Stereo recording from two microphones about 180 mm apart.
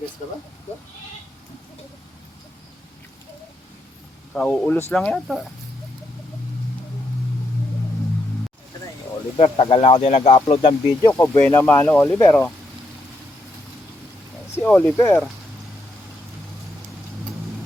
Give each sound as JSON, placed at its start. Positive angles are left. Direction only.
{"t": 4.4, "sound": "speech", "side_deg": 5}
{"t": 9.4, "sound": "speech", "side_deg": 30}
{"t": 11.2, "sound": "speech", "side_deg": 15}
{"t": 14.5, "sound": "speech", "side_deg": 10}